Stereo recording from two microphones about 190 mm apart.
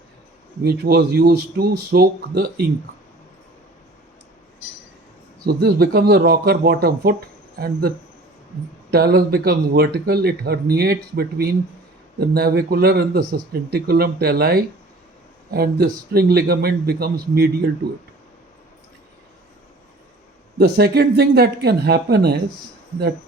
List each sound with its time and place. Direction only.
0.6 s speech: 55° right (ahead or behind)
5.5 s speech: 55° right (ahead or behind)
20.6 s speech: 55° right (ahead or behind)